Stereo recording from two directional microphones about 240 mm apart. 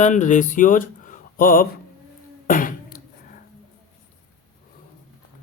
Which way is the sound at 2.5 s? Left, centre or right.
Left.